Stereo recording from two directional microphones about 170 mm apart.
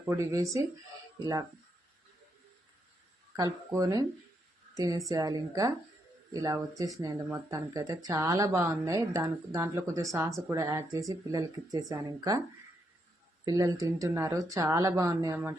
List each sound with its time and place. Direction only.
0.0 s a woman's voice: 15° right (ahead or behind)
3.3 s a woman's voice: 20° right (ahead or behind)
13.4 s a woman's voice: 20° right (ahead or behind)